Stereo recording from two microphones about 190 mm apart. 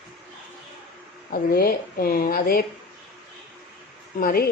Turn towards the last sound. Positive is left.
turn(degrees=50)  # may be behind; listen again after turning